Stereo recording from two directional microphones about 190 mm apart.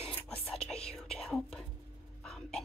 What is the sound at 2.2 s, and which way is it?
Hiccup, 5° left (ahead or behind).